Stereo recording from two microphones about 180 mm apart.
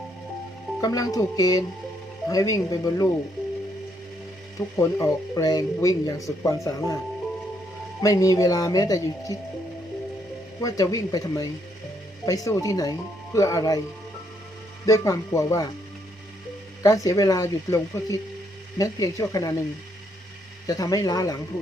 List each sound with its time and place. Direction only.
0.8 s speech: 20° left (ahead or behind)
4.8 s speech: 15° left (ahead or behind)
8.0 s speech: 20° left (ahead or behind)
10.6 s speech: 20° left (ahead or behind)
14.8 s speech: 20° left (ahead or behind)
16.8 s speech: 20° left (ahead or behind)
20.7 s speech: 20° left (ahead or behind)